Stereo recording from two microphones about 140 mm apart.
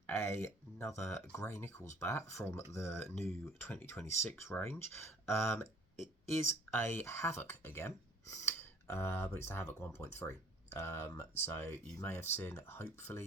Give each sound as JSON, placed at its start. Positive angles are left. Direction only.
{"t": 0.1, "sound": "speech", "side_deg": 20}
{"t": 6.7, "sound": "speech", "side_deg": 15}